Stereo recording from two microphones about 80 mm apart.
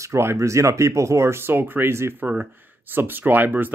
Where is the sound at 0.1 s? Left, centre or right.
Right.